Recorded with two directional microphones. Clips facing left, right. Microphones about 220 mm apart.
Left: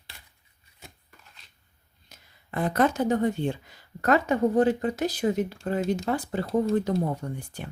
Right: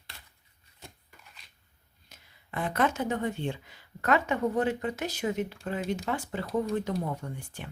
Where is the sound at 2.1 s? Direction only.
40° left (ahead or behind).